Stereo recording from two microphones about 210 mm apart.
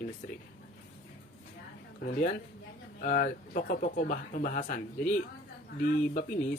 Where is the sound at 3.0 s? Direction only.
40° left (ahead or behind).